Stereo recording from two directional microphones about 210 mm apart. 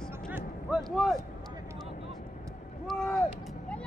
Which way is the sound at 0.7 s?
Centre (ahead or behind).